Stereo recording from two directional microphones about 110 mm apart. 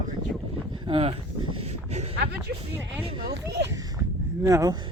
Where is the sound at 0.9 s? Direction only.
55° right (ahead or behind).